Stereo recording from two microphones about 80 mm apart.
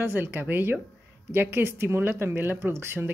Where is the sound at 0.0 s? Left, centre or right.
Right.